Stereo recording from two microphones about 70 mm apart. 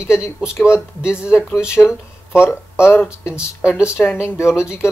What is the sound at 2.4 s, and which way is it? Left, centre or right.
Speech, left.